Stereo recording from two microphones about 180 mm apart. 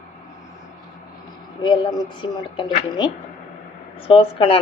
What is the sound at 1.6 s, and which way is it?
Speech, 25° left (ahead or behind).